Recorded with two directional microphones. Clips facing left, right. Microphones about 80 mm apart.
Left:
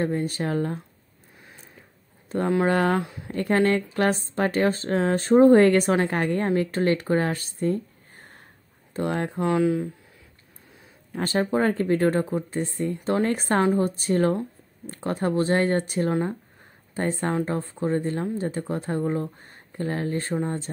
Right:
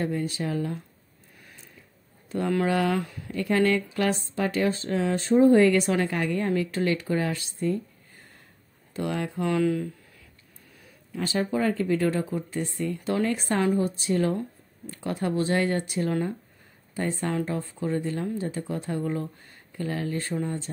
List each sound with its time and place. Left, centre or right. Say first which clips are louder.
0.0 s a woman's voice: left 3 dB; left
2.2 s a sound: left 3 dB; left
2.6 s a woman's voice: left 3 dB; left
8.9 s a woman's voice: left 3 dB; left
11.1 s a woman's voice: left 3 dB; left